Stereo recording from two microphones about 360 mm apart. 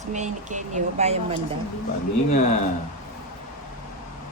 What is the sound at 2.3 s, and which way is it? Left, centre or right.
Speech, left.